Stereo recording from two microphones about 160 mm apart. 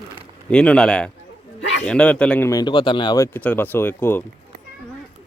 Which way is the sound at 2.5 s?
25° left (ahead or behind).